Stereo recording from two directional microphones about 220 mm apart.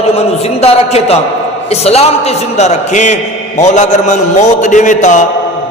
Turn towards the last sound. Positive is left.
turn(degrees=35)  # may be behind; listen again after turning